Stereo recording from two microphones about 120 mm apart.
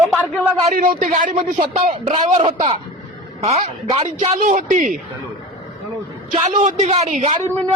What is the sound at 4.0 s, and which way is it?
Speech, 55° right (ahead or behind).